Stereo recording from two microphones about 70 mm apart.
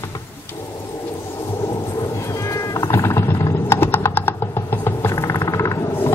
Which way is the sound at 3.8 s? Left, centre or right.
Left.